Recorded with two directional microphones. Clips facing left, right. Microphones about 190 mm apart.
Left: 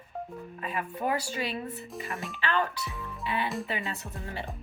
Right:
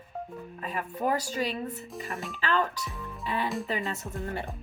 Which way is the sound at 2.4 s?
40° right (ahead or behind).